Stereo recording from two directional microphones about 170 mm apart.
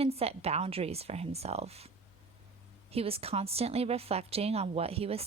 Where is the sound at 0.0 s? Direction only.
35° right (ahead or behind).